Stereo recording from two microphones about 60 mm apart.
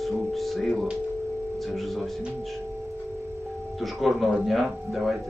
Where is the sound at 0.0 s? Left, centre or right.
Centre.